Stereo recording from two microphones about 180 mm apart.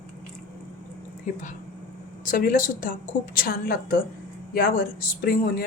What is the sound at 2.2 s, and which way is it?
Speech, 50° left (ahead or behind).